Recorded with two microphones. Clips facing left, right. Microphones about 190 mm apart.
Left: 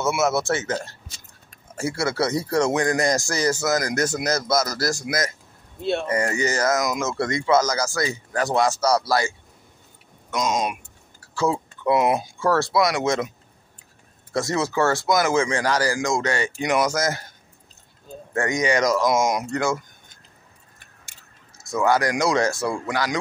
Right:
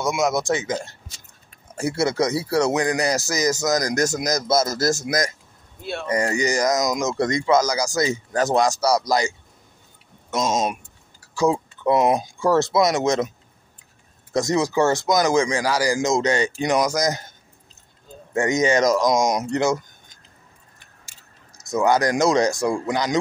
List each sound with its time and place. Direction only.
0.0 s speech: 15° right (ahead or behind)
1.8 s speech: 20° right (ahead or behind)
3.1 s speech: 5° right (ahead or behind)
3.8 s speech: 40° right (ahead or behind)
4.2 s speech: 15° right (ahead or behind)
4.5 s speech: 25° right (ahead or behind)
4.9 s speech: 40° right (ahead or behind)
5.8 s speech: 25° left (ahead or behind)
6.3 s speech: 15° right (ahead or behind)
10.3 s speech: 25° right (ahead or behind)
11.1 s speech: 10° right (ahead or behind)
14.3 s speech: 15° right (ahead or behind)
18.3 s speech: 20° right (ahead or behind)
21.6 s speech: 20° right (ahead or behind)